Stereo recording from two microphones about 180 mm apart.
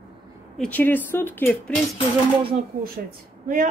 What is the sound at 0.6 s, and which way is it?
Speech, 10° left (ahead or behind).